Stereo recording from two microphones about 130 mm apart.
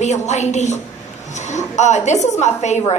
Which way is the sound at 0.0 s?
65° left (ahead or behind).